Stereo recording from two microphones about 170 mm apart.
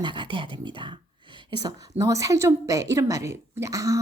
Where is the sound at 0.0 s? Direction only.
25° right (ahead or behind).